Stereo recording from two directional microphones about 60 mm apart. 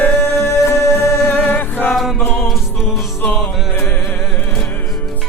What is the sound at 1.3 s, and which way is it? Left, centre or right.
Music, left.